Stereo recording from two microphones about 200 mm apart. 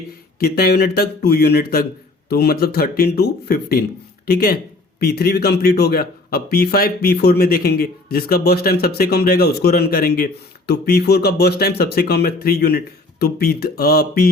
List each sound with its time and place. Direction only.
0.3 s a man's voice: 50° left (ahead or behind)